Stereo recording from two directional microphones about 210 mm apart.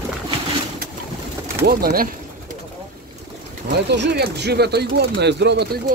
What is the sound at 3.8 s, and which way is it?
Speech, 55° right (ahead or behind).